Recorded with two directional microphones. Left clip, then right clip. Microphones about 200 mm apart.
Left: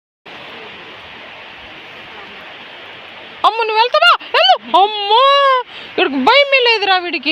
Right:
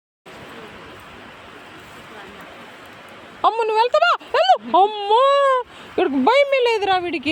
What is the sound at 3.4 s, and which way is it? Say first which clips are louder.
Speech: left 4 dB; 20° right (ahead or behind).